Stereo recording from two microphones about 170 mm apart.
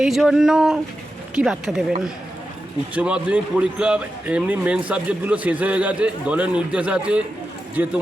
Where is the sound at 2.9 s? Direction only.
5° right (ahead or behind).